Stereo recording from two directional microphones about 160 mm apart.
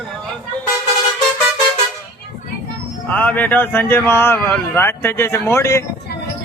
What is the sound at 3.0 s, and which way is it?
Speech, 10° left (ahead or behind).